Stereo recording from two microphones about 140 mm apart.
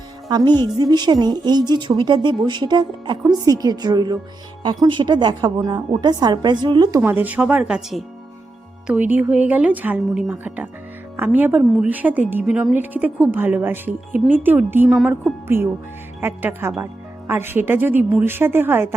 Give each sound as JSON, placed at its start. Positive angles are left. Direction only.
{"t": 0.3, "sound": "a woman's voice", "side_deg": -30}
{"t": 7.0, "sound": "speech", "side_deg": -15}
{"t": 14.9, "sound": "speech", "side_deg": 0}
{"t": 15.4, "sound": "speech", "side_deg": -15}